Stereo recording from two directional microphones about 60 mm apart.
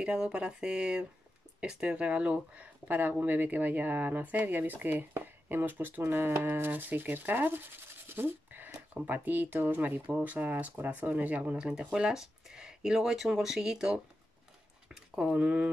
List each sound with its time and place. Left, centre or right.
0.0 s speech: centre